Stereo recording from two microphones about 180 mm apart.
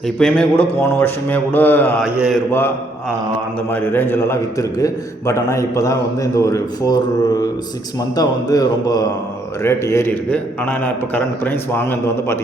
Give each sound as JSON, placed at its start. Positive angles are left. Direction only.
{"t": 0.2, "sound": "a man's voice", "side_deg": 5}
{"t": 2.1, "sound": "a man's voice", "side_deg": -5}
{"t": 2.5, "sound": "a man's voice", "side_deg": 15}